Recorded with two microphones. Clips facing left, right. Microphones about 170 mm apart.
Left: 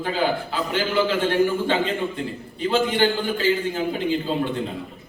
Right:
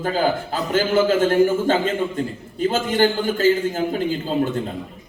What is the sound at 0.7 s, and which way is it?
A man's voice, 45° right (ahead or behind).